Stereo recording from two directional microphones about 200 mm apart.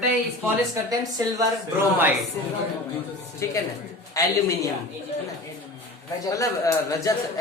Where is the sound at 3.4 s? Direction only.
15° left (ahead or behind).